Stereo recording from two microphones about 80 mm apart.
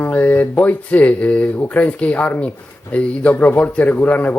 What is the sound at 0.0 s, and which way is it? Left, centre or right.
Speech, left.